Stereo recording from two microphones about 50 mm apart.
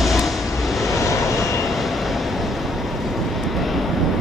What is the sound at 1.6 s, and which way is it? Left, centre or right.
Vehicle, centre.